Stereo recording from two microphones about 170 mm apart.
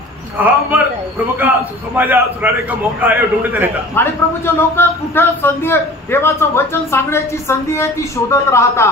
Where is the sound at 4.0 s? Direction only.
15° left (ahead or behind).